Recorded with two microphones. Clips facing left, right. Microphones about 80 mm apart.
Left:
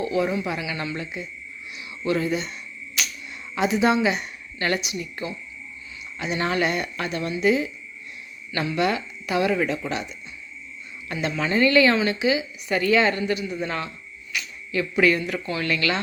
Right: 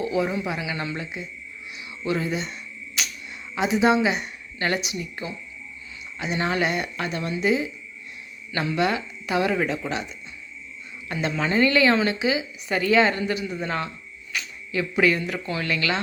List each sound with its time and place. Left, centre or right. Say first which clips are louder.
0.0 s a woman's voice: left 1 dB; centre
3.0 s a sound: left 1 dB; right
3.5 s a woman's voice: even; right
11.1 s a woman's voice: even; right
14.3 s a sound: left 1 dB; right
15.0 s a woman's voice: left 1 dB; right